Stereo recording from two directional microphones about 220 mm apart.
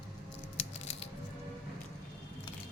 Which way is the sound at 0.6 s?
30° left (ahead or behind).